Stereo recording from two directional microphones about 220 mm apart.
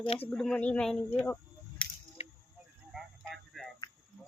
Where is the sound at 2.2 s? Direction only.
25° left (ahead or behind).